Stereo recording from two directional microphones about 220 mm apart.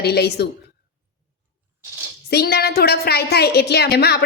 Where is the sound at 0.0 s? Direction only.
45° left (ahead or behind).